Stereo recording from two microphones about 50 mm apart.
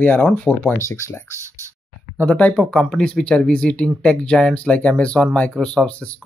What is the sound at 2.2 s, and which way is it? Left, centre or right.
Speech, left.